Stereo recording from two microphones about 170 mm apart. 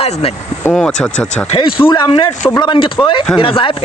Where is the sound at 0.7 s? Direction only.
5° left (ahead or behind).